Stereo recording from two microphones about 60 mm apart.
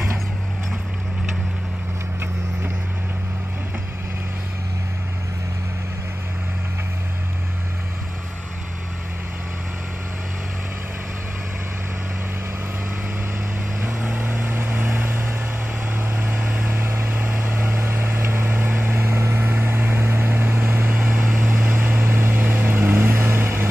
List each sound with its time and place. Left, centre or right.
14.1 s vehicle: right
17.1 s vehicle: right